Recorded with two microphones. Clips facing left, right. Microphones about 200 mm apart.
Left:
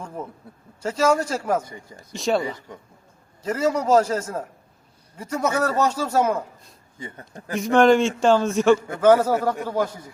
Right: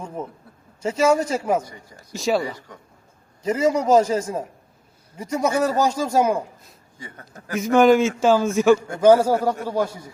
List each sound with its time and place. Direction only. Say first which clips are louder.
0.0 s a sound: right 2 dB; 10° right (ahead or behind)
0.8 s a man's voice: right 2 dB; 10° right (ahead or behind)
3.4 s a man's voice: right 2 dB; 10° right (ahead or behind)
7.0 s a man's voice: left 3 dB; 20° left (ahead or behind)
7.5 s a man's voice: right 1 dB; centre (ahead or behind)
9.0 s a man's voice: right 2 dB; 10° right (ahead or behind)